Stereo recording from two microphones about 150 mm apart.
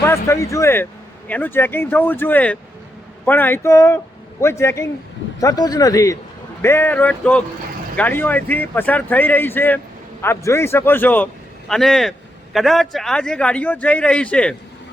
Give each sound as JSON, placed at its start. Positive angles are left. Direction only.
{"t": 0.0, "sound": "speech", "side_deg": 15}
{"t": 11.7, "sound": "speech", "side_deg": 0}